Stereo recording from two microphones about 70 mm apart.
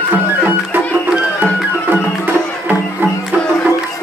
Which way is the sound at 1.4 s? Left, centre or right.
Right.